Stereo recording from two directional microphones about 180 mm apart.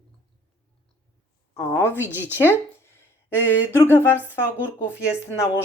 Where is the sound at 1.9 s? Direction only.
10° right (ahead or behind).